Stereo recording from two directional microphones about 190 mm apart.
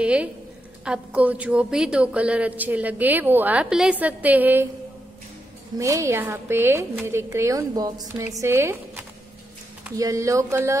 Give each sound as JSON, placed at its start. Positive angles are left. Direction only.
{"t": 0.0, "sound": "a woman's voice", "side_deg": -5}
{"t": 5.8, "sound": "a woman's voice", "side_deg": -15}